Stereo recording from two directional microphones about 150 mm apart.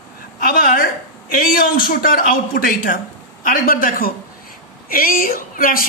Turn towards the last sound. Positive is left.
turn(degrees=70)  # may be behind; listen again after turning